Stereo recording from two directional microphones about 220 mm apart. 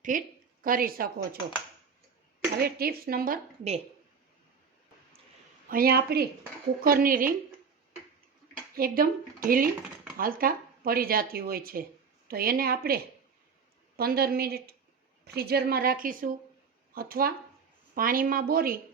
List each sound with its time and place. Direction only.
0.1 s speech: 35° right (ahead or behind)
2.6 s speech: 45° right (ahead or behind)
5.6 s speech: 40° right (ahead or behind)
8.7 s a woman's voice: 40° right (ahead or behind)